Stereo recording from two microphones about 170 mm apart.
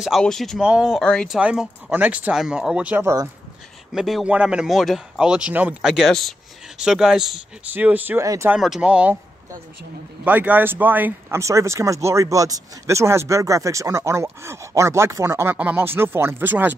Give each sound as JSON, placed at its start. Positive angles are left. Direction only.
{"t": 0.0, "sound": "speech", "side_deg": 0}
{"t": 1.4, "sound": "speech", "side_deg": -5}
{"t": 3.9, "sound": "speech", "side_deg": -5}
{"t": 8.5, "sound": "speech", "side_deg": 0}
{"t": 10.2, "sound": "speech", "side_deg": -10}